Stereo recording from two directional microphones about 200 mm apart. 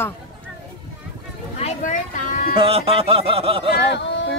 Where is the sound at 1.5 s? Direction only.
35° left (ahead or behind).